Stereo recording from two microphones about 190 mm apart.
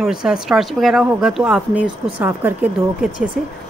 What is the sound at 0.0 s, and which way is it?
Speech, 5° right (ahead or behind).